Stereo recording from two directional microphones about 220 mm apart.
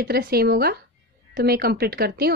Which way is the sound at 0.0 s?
45° right (ahead or behind).